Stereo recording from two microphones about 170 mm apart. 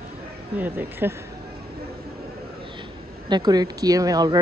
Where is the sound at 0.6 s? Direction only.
10° right (ahead or behind).